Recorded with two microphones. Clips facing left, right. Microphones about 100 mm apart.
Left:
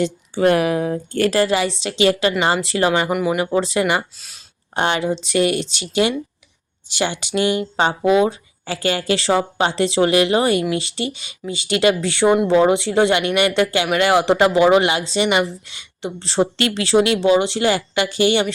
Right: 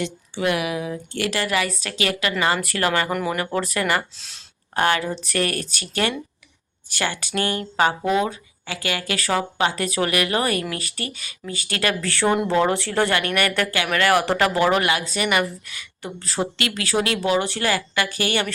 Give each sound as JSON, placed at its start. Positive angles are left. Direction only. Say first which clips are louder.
{"t": 0.0, "sound": "a woman's voice", "louder": "left 7 dB", "side_deg": 40}
{"t": 4.2, "sound": "speech", "louder": "even", "side_deg": 5}
{"t": 4.7, "sound": "speech", "louder": "left 2 dB", "side_deg": 25}
{"t": 8.3, "sound": "speech", "louder": "left 6 dB", "side_deg": 35}